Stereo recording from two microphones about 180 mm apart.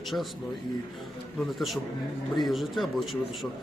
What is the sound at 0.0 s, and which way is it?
Speech, centre (ahead or behind).